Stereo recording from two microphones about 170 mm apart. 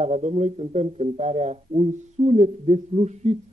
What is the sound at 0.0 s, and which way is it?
Speech, 40° right (ahead or behind).